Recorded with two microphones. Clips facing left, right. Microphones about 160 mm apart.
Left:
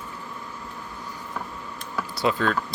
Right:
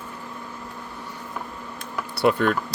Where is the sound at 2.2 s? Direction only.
60° right (ahead or behind).